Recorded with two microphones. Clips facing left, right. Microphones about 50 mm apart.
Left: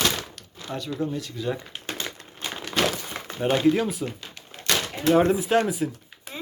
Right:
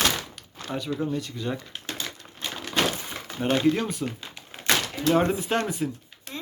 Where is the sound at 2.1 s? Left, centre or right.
Centre.